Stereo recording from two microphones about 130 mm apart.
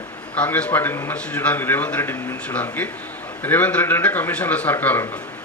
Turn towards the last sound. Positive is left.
turn(degrees=15)  # may be behind; listen again after turning